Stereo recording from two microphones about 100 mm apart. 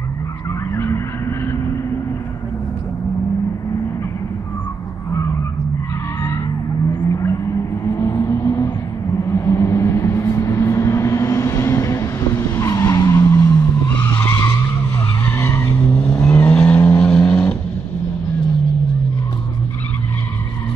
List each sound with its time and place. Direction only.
0.7 s vehicle: 25° left (ahead or behind)
7.1 s vehicle: 30° left (ahead or behind)
7.9 s a sound: 30° left (ahead or behind)
9.2 s vehicle: 30° left (ahead or behind)
13.8 s vehicle: 15° left (ahead or behind)
15.3 s vehicle: 30° left (ahead or behind)
15.9 s vehicle: 15° left (ahead or behind)